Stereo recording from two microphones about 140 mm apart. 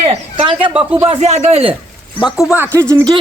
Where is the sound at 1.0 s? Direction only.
50° right (ahead or behind).